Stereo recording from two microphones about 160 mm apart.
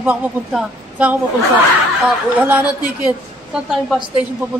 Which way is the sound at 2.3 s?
10° right (ahead or behind).